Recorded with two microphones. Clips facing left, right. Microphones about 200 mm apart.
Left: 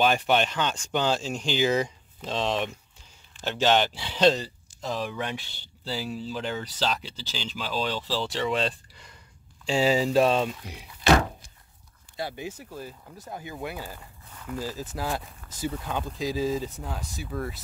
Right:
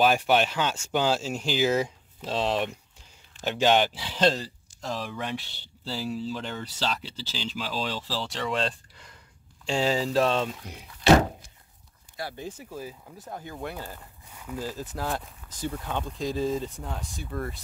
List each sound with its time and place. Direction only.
0.0 s speech: 5° right (ahead or behind)
12.2 s speech: 20° left (ahead or behind)
12.4 s speech: centre (ahead or behind)
13.4 s speech: 10° left (ahead or behind)
14.3 s a sound: 10° right (ahead or behind)
14.6 s speech: 5° left (ahead or behind)